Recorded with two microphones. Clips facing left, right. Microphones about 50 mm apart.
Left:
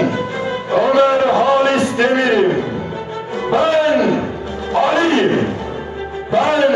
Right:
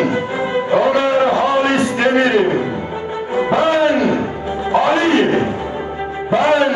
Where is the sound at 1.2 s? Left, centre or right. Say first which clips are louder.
Left 1 dB; right.